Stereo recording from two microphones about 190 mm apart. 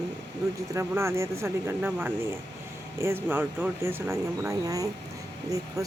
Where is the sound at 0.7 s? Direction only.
15° right (ahead or behind).